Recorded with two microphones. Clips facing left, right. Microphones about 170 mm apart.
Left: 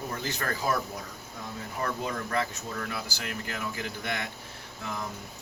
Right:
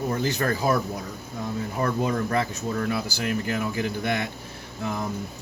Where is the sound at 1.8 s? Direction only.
30° right (ahead or behind).